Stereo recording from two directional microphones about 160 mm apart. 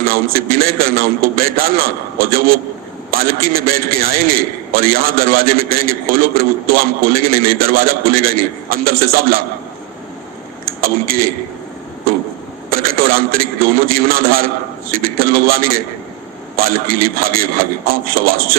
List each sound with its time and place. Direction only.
0.1 s a man's voice: 65° right (ahead or behind)
10.8 s a man's voice: 65° right (ahead or behind)
12.7 s a man's voice: 65° right (ahead or behind)